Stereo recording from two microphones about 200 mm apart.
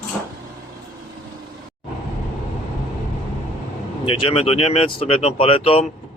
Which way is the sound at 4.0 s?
30° left (ahead or behind).